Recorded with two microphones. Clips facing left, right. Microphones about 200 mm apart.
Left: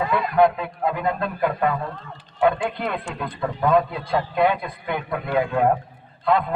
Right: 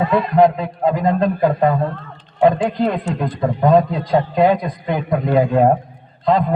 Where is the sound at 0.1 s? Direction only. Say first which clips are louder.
Right 4 dB; 35° right (ahead or behind).